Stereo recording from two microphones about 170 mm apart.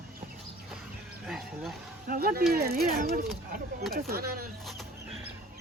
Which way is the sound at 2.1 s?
60° right (ahead or behind).